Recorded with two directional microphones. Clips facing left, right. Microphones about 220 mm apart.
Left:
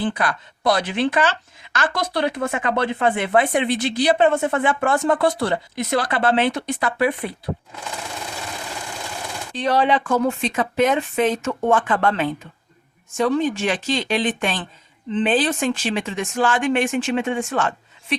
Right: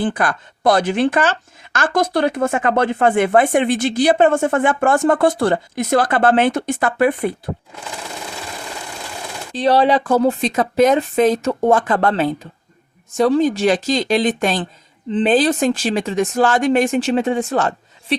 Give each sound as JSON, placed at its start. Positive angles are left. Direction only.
{"t": 0.0, "sound": "speech", "side_deg": -50}
{"t": 9.5, "sound": "speech", "side_deg": -35}